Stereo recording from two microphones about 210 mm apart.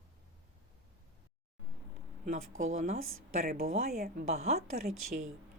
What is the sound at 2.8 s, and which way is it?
A woman's voice, 40° right (ahead or behind).